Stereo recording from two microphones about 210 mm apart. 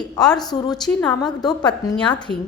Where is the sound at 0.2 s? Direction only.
5° left (ahead or behind).